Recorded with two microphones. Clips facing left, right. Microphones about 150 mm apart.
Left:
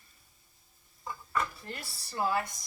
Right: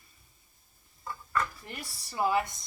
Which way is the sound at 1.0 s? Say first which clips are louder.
Right 1 dB; 15° left (ahead or behind).